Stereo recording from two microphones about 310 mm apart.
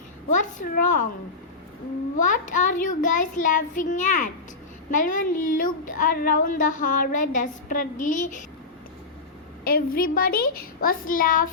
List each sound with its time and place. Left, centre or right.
0.3 s child singing: left
2.2 s child singing: left
9.6 s child singing: left